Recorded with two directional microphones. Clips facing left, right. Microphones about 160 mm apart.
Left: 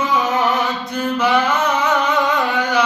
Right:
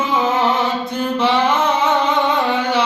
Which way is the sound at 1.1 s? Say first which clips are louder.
Right 1 dB; 25° right (ahead or behind).